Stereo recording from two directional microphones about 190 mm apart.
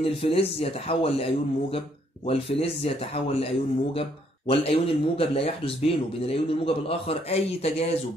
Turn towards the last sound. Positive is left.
turn(degrees=30)  # may be behind; listen again after turning